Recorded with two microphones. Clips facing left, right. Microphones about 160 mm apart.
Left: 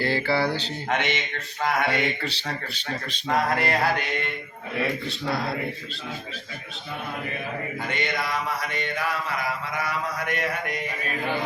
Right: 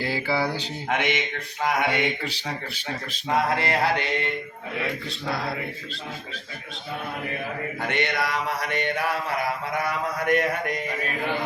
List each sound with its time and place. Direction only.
0.0 s speech: 10° right (ahead or behind)
3.5 s music: 25° right (ahead or behind)
5.0 s speech: centre (ahead or behind)
7.8 s mantra: 70° right (ahead or behind)
9.7 s mantra: 50° right (ahead or behind)